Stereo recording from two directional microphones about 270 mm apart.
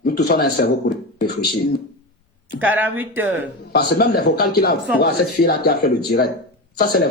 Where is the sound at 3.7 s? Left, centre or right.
Left.